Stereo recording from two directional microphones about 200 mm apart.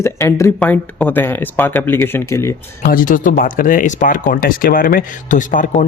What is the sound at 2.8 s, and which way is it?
Speech, 45° left (ahead or behind).